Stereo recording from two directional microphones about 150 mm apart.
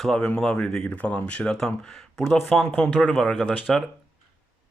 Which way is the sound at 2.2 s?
15° left (ahead or behind).